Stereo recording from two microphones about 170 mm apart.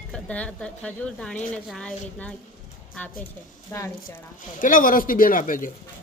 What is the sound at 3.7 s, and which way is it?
Speech, 15° left (ahead or behind).